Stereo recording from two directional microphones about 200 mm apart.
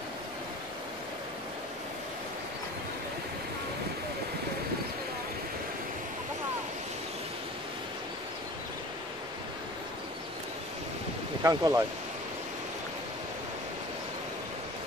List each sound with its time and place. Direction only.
11.4 s speech: 15° right (ahead or behind)